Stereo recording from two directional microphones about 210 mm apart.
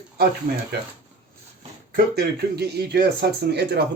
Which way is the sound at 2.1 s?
50° right (ahead or behind).